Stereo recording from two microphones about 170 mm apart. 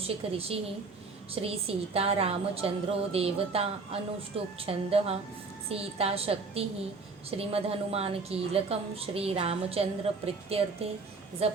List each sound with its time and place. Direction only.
0.0 s a woman's voice: 35° right (ahead or behind)